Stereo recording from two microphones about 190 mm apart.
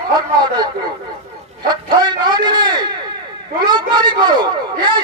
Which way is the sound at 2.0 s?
25° right (ahead or behind).